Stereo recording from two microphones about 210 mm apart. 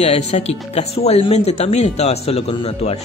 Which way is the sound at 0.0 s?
30° left (ahead or behind).